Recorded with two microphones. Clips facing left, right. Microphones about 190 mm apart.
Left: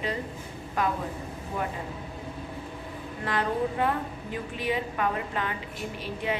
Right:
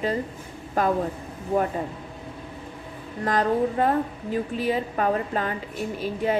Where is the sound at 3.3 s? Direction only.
40° right (ahead or behind).